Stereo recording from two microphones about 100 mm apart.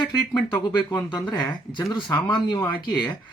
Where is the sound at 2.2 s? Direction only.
45° left (ahead or behind).